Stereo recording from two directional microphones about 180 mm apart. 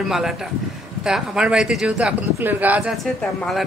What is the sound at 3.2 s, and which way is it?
Speech, 5° left (ahead or behind).